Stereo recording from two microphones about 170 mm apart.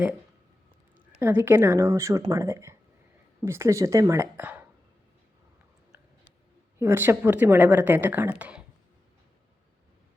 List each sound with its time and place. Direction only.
0.9 s speech: 10° right (ahead or behind)
6.7 s speech: 15° right (ahead or behind)